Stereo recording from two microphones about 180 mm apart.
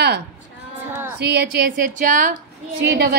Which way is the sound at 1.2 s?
60° right (ahead or behind).